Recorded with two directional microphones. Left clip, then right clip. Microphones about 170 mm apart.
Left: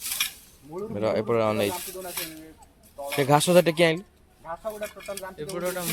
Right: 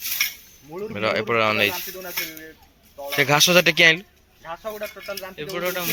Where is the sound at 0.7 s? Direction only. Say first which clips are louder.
Right 3 dB; 40° right (ahead or behind).